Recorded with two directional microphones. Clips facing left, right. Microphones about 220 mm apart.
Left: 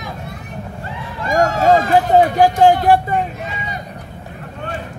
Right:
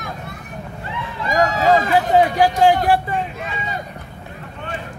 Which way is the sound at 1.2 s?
50° left (ahead or behind).